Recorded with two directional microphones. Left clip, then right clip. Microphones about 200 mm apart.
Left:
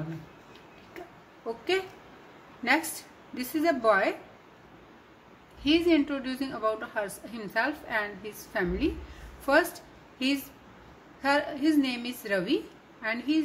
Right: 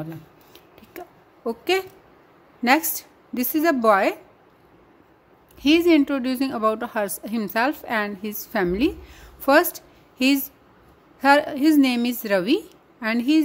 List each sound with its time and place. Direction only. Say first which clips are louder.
0.9 s a sound: right 6 dB; 55° right (ahead or behind)
2.6 s a woman's voice: right 7 dB; 55° right (ahead or behind)
5.6 s a woman's voice: right 7 dB; 55° right (ahead or behind)